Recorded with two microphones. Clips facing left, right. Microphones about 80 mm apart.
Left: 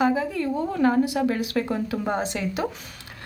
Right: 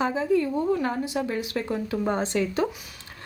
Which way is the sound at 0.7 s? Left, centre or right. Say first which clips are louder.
Left 7 dB; left.